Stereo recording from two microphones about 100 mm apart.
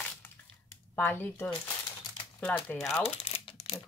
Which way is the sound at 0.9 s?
20° left (ahead or behind).